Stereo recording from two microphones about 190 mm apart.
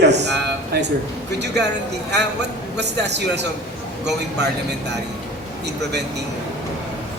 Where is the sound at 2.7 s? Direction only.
65° right (ahead or behind).